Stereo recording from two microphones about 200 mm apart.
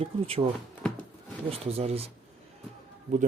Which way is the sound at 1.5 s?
30° right (ahead or behind).